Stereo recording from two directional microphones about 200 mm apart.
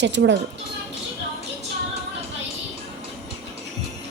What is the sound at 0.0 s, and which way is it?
Speech, 65° right (ahead or behind).